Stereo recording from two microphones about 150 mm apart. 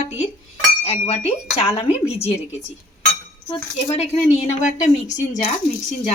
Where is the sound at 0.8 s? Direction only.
45° left (ahead or behind).